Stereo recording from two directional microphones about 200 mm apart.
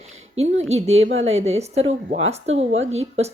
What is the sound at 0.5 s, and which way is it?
A woman's voice, 35° right (ahead or behind).